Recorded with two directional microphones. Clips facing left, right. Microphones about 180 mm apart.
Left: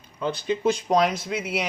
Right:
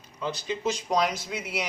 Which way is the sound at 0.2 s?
55° left (ahead or behind).